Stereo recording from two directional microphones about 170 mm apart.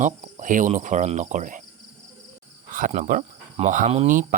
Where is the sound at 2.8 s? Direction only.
50° right (ahead or behind).